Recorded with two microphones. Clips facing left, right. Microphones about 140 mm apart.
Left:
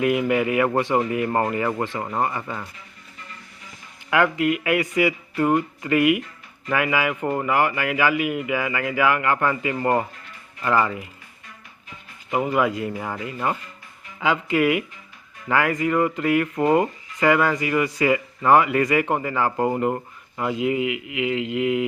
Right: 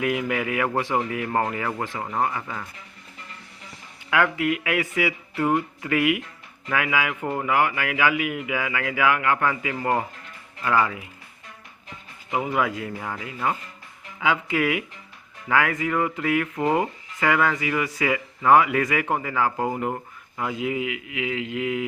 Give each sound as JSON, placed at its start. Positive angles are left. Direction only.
{"t": 0.0, "sound": "speech", "side_deg": 0}
{"t": 4.1, "sound": "speech", "side_deg": 0}
{"t": 12.3, "sound": "speech", "side_deg": 0}